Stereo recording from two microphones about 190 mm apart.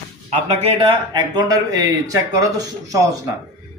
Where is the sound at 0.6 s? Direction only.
25° right (ahead or behind).